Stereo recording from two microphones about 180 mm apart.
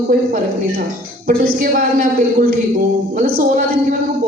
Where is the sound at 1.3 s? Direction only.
55° right (ahead or behind).